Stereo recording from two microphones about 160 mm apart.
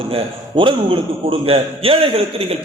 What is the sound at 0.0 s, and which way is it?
A man's voice, 35° right (ahead or behind).